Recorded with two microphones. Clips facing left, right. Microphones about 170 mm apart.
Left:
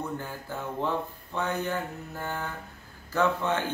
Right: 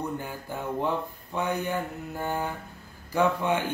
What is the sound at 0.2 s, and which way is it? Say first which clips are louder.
Speech: right 1 dB; 15° right (ahead or behind).